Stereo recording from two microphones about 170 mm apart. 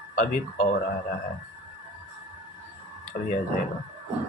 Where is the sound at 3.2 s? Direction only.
65° left (ahead or behind).